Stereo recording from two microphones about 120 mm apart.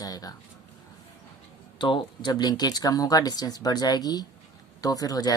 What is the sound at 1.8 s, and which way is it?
Speech, 40° left (ahead or behind).